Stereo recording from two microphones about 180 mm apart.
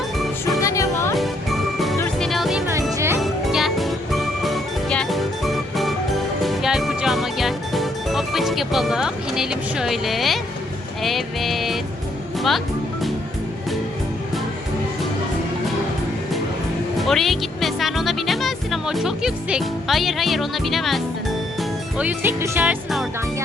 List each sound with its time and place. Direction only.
0.6 s music: 15° left (ahead or behind)
1.1 s music: centre (ahead or behind)
17.0 s music: centre (ahead or behind)
21.9 s speech: 10° right (ahead or behind)